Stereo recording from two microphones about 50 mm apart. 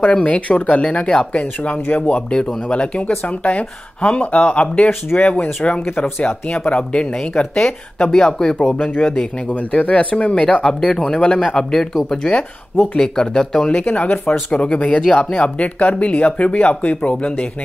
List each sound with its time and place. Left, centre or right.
0.0 s speech: left
5.9 s speech: left
6.6 s speech: left
9.5 s speech: left; by 13.7 s centre
13.7 s speech: left